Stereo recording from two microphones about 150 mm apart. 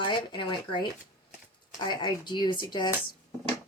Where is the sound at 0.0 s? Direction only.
35° left (ahead or behind).